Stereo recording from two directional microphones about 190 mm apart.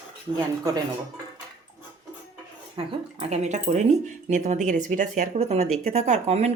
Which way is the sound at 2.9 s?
35° right (ahead or behind).